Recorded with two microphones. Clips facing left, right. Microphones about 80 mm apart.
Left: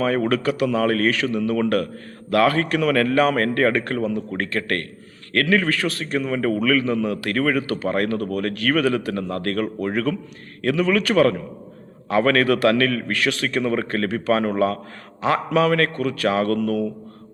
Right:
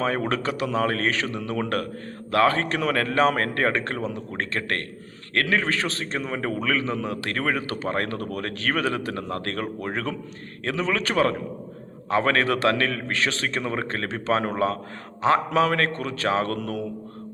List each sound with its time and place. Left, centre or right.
0.0 s a man's voice: right